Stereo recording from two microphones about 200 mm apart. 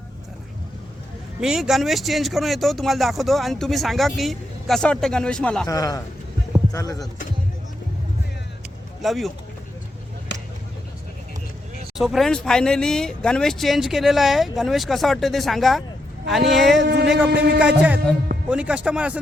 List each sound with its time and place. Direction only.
1.4 s speech: 5° right (ahead or behind)
5.6 s a man's voice: 15° left (ahead or behind)
9.0 s speech: centre (ahead or behind)
10.3 s vehicle: 60° left (ahead or behind)
11.9 s speech: centre (ahead or behind)
16.8 s speech: 55° right (ahead or behind)
17.1 s speech: 5° right (ahead or behind)